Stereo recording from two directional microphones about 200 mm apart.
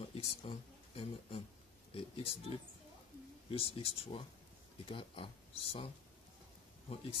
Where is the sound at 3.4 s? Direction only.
30° left (ahead or behind).